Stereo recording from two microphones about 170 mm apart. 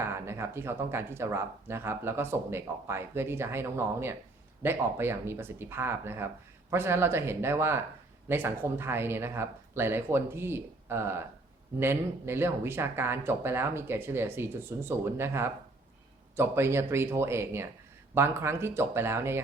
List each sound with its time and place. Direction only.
0.0 s speech: 15° right (ahead or behind)